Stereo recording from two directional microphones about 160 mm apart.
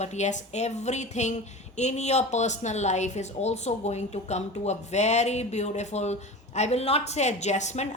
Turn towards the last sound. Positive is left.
turn(degrees=45)  # may be behind; listen again after turning